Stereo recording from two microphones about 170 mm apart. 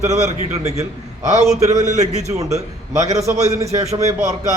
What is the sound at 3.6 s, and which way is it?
Speech, 40° right (ahead or behind).